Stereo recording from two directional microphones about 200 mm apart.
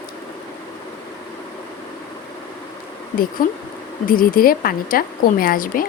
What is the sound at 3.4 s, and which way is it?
A woman's voice, 45° left (ahead or behind).